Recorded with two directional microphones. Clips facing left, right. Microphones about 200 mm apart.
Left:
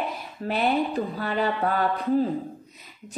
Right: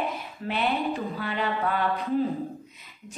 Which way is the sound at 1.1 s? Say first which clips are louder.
Left 3 dB; 40° left (ahead or behind).